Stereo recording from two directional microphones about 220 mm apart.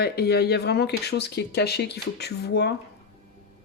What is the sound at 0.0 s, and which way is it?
Speech, 45° left (ahead or behind).